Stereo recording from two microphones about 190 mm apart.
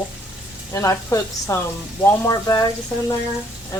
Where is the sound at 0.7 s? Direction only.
15° left (ahead or behind).